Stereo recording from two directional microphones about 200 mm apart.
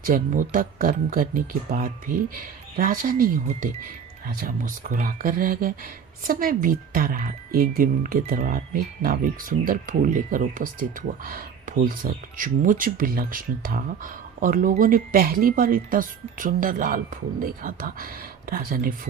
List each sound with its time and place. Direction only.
0.0 s speech: 40° right (ahead or behind)
2.7 s speech: 45° right (ahead or behind)